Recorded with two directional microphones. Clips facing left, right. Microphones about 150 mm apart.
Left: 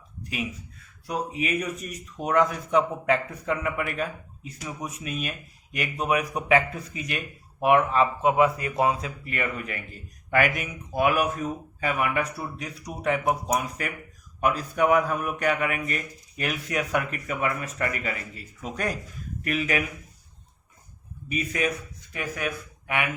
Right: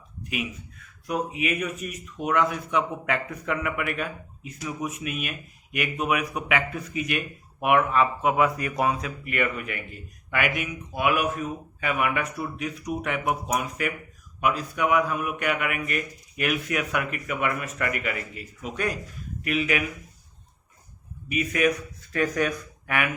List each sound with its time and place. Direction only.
0.2 s speech: 35° left (ahead or behind)
21.2 s a man's voice: 30° left (ahead or behind)
22.1 s speech: 10° left (ahead or behind)